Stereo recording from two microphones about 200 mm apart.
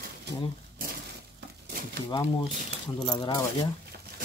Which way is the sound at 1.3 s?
55° right (ahead or behind).